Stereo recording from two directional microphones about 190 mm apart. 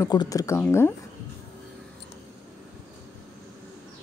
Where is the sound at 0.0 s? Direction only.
20° left (ahead or behind).